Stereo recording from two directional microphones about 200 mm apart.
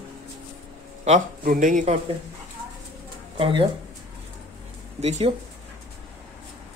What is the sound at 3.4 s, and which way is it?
Speech, 25° right (ahead or behind).